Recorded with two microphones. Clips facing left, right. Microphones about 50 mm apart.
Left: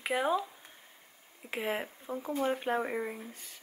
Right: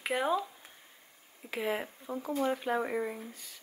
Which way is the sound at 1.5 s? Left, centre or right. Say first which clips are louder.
Right 1 dB; centre.